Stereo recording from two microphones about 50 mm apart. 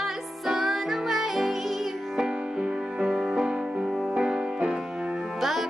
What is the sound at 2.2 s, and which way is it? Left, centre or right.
Music, centre.